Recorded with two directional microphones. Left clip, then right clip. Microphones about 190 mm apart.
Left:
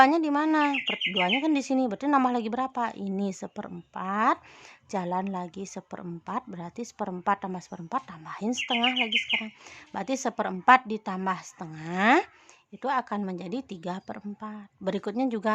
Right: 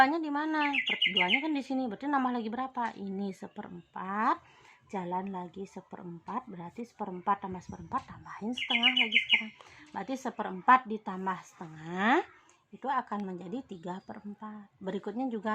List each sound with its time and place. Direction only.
0.0 s a woman's voice: 35° left (ahead or behind)